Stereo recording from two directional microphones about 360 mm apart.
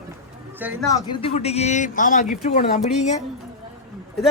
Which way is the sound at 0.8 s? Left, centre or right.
Centre.